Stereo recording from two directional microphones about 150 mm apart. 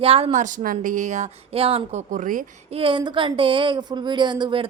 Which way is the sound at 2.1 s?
60° right (ahead or behind).